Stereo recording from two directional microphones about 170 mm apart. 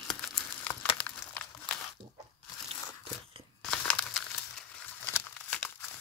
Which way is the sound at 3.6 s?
5° left (ahead or behind).